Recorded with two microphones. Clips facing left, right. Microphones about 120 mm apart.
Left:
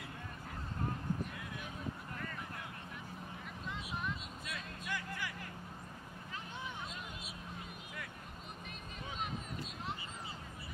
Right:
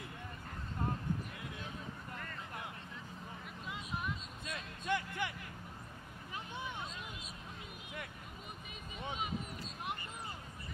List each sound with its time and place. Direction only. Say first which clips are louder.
3.6 s vehicle: even; 5° right (ahead or behind)
4.5 s music: right 7 dB; 25° right (ahead or behind)